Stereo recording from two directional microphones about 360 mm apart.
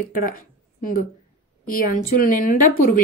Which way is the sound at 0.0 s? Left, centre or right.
Left.